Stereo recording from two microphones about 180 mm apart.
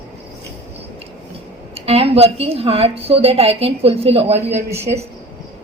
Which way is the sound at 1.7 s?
35° right (ahead or behind).